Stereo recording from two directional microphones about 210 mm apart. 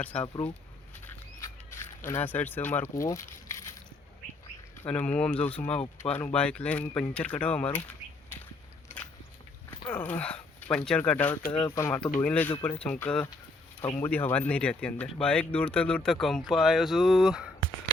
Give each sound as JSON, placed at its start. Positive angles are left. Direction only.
{"t": 0.0, "sound": "speech", "side_deg": 5}
{"t": 1.0, "sound": "a sound", "side_deg": 15}
{"t": 4.8, "sound": "speech", "side_deg": 5}
{"t": 9.9, "sound": "speech", "side_deg": 5}
{"t": 11.5, "sound": "speech", "side_deg": 20}